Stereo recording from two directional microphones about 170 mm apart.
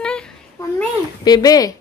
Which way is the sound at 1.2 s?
20° left (ahead or behind).